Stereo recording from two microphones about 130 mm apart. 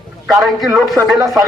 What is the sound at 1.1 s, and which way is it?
Speech, 25° right (ahead or behind).